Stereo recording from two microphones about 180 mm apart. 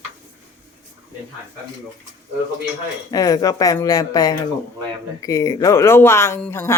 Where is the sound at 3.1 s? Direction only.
20° left (ahead or behind).